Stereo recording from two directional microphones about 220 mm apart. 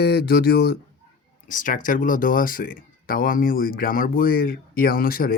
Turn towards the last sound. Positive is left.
turn(degrees=40)  # may be behind; listen again after turning